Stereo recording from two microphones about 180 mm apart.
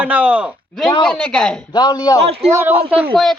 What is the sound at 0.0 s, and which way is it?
Speech, 10° right (ahead or behind).